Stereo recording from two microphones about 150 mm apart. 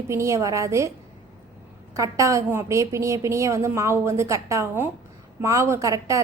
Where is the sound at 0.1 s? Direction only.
20° right (ahead or behind).